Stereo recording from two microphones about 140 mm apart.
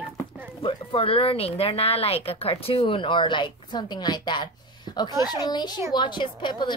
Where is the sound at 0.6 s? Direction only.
40° left (ahead or behind).